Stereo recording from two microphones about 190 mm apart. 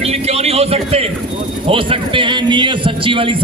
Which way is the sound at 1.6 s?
30° right (ahead or behind).